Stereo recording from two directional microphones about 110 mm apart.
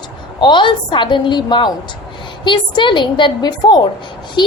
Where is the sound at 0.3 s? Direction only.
45° left (ahead or behind).